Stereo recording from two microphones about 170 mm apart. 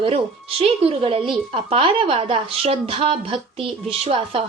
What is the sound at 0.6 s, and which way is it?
A woman's voice, 35° right (ahead or behind).